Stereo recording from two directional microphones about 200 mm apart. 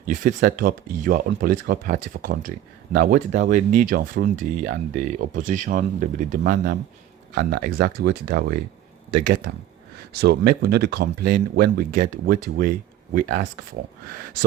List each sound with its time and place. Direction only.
0.0 s speech: 40° right (ahead or behind)